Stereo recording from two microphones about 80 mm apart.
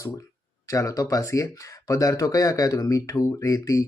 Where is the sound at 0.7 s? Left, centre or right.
Left.